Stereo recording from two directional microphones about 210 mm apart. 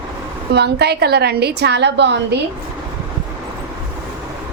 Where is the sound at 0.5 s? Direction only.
50° right (ahead or behind).